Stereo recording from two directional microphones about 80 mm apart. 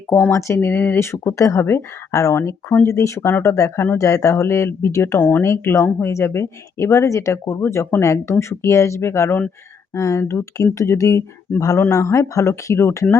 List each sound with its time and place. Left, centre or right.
0.1 s speech: left